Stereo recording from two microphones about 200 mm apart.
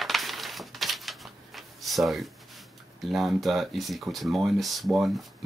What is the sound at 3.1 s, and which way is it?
Speech, centre (ahead or behind).